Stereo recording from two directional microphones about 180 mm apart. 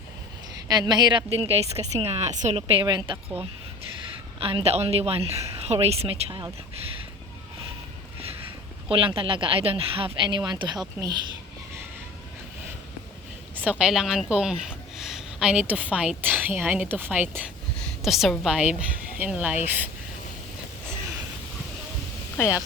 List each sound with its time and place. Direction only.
0.7 s a woman's voice: 25° right (ahead or behind)
4.4 s a woman's voice: 30° right (ahead or behind)
8.9 s speech: 30° right (ahead or behind)
13.6 s a woman's voice: 5° right (ahead or behind)
22.4 s speech: 15° left (ahead or behind)